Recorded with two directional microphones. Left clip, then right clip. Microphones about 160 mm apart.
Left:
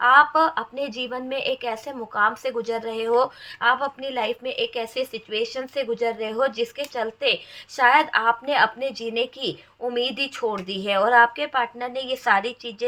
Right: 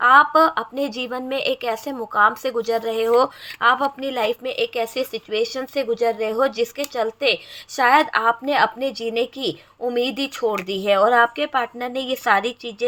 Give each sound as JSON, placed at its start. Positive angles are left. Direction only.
{"t": 0.0, "sound": "a woman's voice", "side_deg": -45}